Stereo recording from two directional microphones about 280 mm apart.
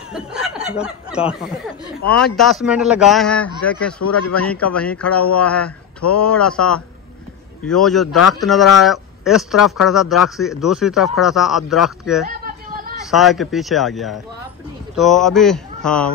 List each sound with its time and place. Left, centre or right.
0.1 s snicker: centre
0.7 s speech: centre
4.0 s a man's voice: left
4.5 s speech: centre